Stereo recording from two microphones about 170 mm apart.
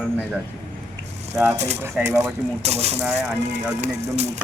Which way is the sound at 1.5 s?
40° right (ahead or behind).